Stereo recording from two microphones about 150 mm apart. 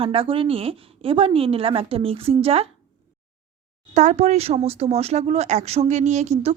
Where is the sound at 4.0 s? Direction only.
50° right (ahead or behind).